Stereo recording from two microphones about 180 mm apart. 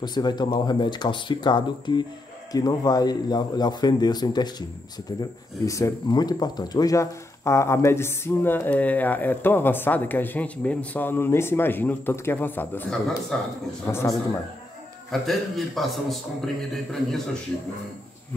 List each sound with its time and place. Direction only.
0.0 s speech: 25° left (ahead or behind)
5.7 s speech: 15° left (ahead or behind)
15.0 s a man's voice: centre (ahead or behind)